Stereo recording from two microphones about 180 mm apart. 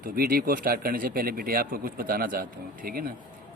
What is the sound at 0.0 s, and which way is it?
A man's voice, 55° right (ahead or behind).